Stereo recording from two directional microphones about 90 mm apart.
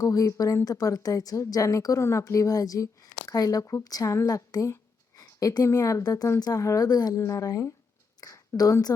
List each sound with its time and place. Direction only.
0.0 s speech: 40° left (ahead or behind)
7.2 s speech: 35° left (ahead or behind)